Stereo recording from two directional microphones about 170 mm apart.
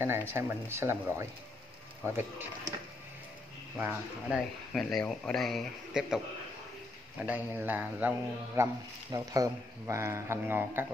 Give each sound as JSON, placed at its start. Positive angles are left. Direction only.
{"t": 0.0, "sound": "speech", "side_deg": -15}
{"t": 3.7, "sound": "speech", "side_deg": -10}
{"t": 4.9, "sound": "a man's voice", "side_deg": 5}